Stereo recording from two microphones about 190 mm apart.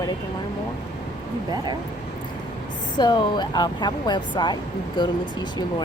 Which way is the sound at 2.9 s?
20° left (ahead or behind).